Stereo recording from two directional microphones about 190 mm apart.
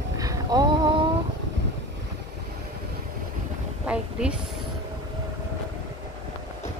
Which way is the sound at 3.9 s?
5° right (ahead or behind).